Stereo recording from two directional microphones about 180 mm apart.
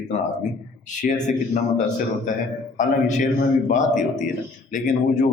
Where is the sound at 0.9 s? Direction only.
45° left (ahead or behind).